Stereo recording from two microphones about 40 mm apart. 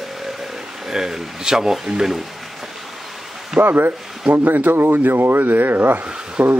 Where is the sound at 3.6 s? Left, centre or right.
Right.